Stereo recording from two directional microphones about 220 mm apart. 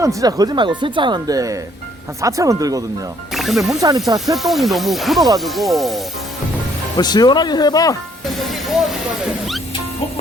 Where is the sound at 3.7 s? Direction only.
15° right (ahead or behind).